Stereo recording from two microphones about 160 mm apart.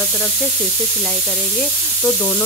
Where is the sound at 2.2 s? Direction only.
20° left (ahead or behind).